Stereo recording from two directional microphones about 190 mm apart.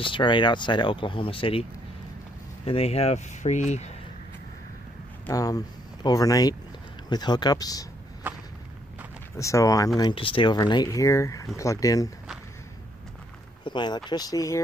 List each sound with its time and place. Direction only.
0.0 s speech: 25° left (ahead or behind)
5.3 s speech: 20° left (ahead or behind)
8.3 s walk: 10° right (ahead or behind)
9.4 s speech: 15° left (ahead or behind)
13.7 s speech: 25° left (ahead or behind)